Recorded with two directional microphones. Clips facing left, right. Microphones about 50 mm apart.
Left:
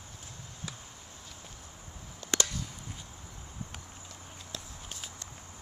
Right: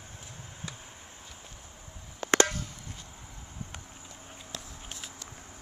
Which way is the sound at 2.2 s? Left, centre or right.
Right.